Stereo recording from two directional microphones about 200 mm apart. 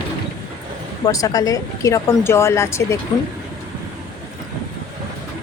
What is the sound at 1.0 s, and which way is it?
Speech, 15° left (ahead or behind).